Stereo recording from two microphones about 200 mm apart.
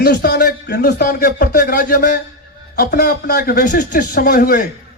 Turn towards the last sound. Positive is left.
turn(degrees=45)  # may be behind; listen again after turning